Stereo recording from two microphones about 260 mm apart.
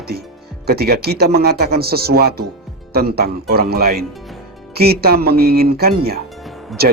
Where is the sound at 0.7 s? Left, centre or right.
Right.